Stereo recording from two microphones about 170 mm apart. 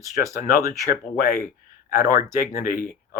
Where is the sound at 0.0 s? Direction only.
20° right (ahead or behind).